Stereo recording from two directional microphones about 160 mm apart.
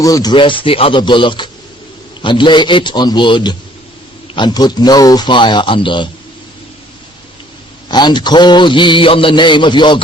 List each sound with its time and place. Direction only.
0.0 s a man's voice: 25° left (ahead or behind)
7.9 s a man's voice: 30° left (ahead or behind)